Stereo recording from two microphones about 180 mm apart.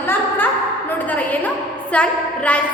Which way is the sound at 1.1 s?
10° left (ahead or behind).